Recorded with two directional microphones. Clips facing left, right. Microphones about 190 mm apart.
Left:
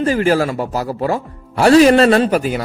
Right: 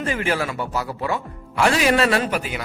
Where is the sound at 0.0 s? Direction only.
35° left (ahead or behind).